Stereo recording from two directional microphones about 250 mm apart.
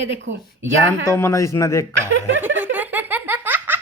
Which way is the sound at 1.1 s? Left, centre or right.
Centre.